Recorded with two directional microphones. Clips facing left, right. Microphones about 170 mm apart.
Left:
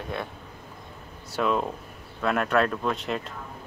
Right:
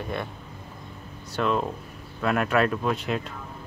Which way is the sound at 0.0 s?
Centre (ahead or behind).